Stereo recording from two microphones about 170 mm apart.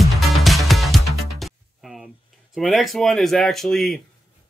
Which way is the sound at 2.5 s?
Centre (ahead or behind).